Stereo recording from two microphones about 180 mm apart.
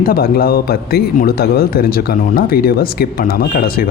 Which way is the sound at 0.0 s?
55° left (ahead or behind).